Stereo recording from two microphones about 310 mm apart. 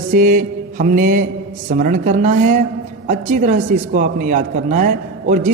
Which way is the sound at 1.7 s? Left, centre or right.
Right.